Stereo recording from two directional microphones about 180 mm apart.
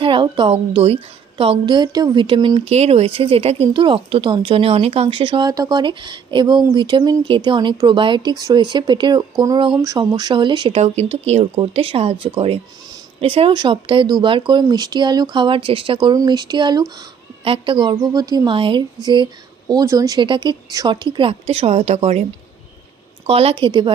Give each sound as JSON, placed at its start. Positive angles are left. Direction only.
{"t": 0.0, "sound": "speech", "side_deg": -25}
{"t": 10.8, "sound": "speech", "side_deg": -35}
{"t": 23.2, "sound": "speech", "side_deg": -35}